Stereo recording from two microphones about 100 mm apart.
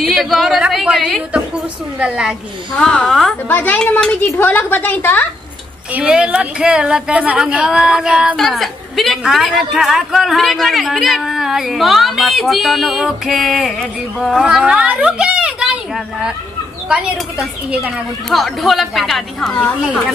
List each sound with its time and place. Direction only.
0.0 s a woman's voice: centre (ahead or behind)
2.8 s speech: 10° left (ahead or behind)
3.4 s a woman's voice: 20° left (ahead or behind)
5.9 s speech: 10° right (ahead or behind)
8.4 s a woman's voice: centre (ahead or behind)
18.3 s a woman's voice: centre (ahead or behind)